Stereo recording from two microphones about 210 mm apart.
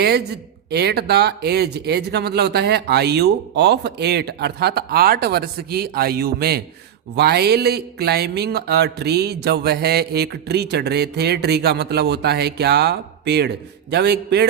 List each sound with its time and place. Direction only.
0.7 s speech: 50° right (ahead or behind)